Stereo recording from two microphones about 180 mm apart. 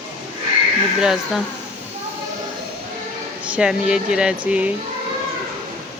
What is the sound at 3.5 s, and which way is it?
Speech, 5° right (ahead or behind).